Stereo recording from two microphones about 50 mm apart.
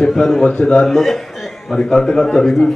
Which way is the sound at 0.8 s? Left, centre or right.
Centre.